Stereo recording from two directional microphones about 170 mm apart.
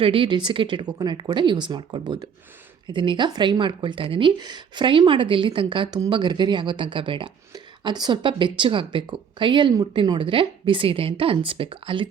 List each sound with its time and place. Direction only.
0.0 s speech: 30° right (ahead or behind)